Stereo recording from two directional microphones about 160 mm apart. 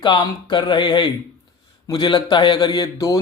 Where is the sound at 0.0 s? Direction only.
30° left (ahead or behind).